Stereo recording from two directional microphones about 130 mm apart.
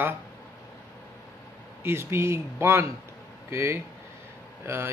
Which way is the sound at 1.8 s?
20° right (ahead or behind).